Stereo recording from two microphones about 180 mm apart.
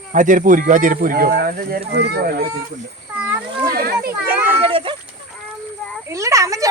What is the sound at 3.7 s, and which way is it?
Children playing, 55° right (ahead or behind).